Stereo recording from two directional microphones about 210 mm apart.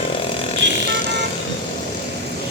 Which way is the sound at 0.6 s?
55° right (ahead or behind).